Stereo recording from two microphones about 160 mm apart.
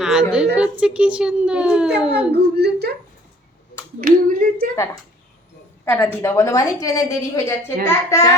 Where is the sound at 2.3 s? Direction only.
90° right.